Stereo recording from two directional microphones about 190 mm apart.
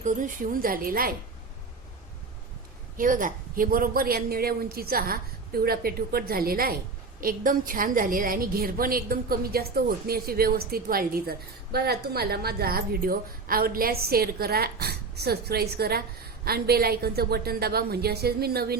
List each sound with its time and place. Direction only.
0.0 s a woman's voice: 45° right (ahead or behind)
3.0 s a woman's voice: 45° right (ahead or behind)